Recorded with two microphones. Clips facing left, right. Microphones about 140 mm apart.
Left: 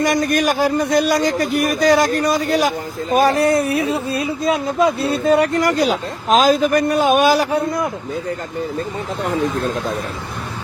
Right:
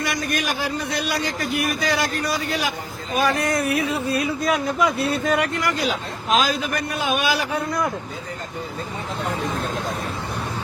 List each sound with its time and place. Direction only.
0.0 s speech: 45° left (ahead or behind)